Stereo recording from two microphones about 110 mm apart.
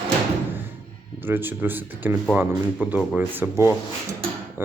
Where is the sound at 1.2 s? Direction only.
20° right (ahead or behind).